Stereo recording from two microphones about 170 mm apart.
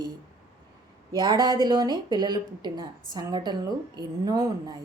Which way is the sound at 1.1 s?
25° right (ahead or behind).